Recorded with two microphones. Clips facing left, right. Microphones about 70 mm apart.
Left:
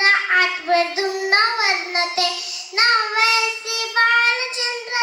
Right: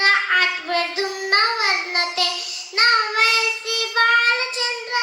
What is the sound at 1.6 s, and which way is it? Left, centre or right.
Child singing, right.